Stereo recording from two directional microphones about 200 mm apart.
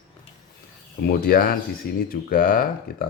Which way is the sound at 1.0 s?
45° left (ahead or behind).